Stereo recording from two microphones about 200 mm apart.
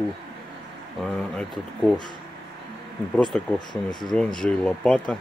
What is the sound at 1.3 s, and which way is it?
Speech, centre (ahead or behind).